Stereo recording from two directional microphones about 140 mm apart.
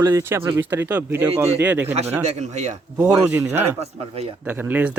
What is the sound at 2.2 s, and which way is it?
Speech, 50° right (ahead or behind).